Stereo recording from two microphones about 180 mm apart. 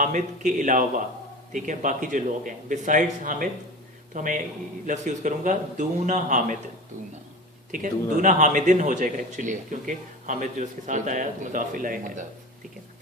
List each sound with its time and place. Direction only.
0.0 s a man's voice: 45° right (ahead or behind)
7.7 s a man's voice: 45° right (ahead or behind)